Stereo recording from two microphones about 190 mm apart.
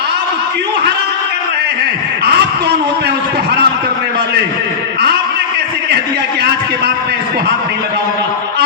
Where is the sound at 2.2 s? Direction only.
60° right (ahead or behind).